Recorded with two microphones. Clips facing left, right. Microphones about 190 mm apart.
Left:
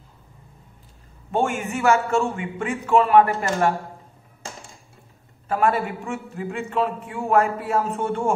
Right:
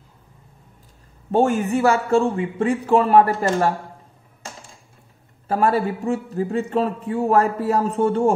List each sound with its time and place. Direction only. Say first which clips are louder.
1.3 s a man's voice: right 6 dB; 40° right (ahead or behind)
5.5 s a man's voice: right 2 dB; 35° right (ahead or behind)